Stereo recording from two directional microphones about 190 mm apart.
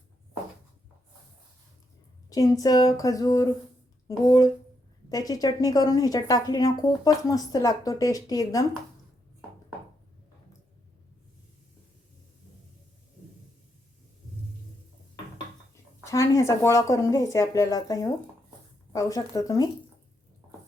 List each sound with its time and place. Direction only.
2.3 s speech: 20° left (ahead or behind)
15.7 s speech: 15° left (ahead or behind)